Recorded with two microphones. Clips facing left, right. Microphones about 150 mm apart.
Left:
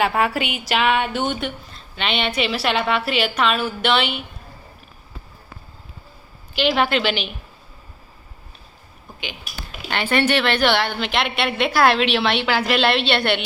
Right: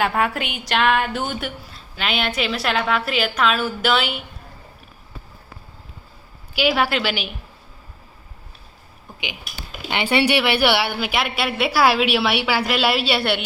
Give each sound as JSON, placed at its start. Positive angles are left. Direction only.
{"t": 0.0, "sound": "a woman's voice", "side_deg": 0}
{"t": 6.6, "sound": "a woman's voice", "side_deg": -5}
{"t": 9.9, "sound": "a woman's voice", "side_deg": -15}